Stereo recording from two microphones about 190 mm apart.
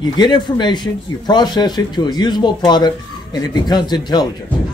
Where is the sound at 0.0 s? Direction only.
20° left (ahead or behind).